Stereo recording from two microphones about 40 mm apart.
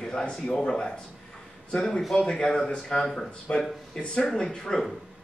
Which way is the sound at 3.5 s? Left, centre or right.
Left.